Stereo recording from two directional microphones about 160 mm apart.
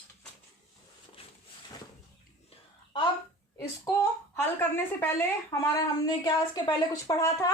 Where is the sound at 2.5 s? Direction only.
30° left (ahead or behind).